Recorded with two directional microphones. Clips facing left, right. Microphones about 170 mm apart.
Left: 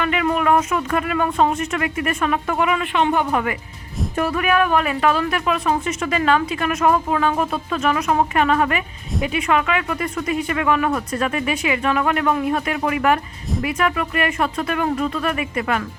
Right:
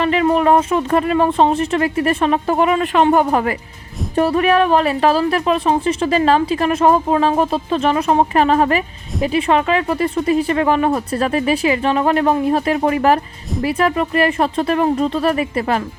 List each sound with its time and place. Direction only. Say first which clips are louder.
0.0 s a woman's voice: right 5 dB; 30° right (ahead or behind)